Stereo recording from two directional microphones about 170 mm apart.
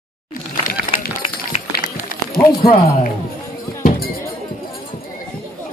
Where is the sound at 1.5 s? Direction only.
35° left (ahead or behind).